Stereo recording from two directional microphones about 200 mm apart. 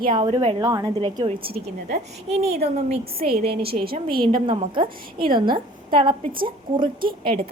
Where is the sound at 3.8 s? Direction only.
50° right (ahead or behind).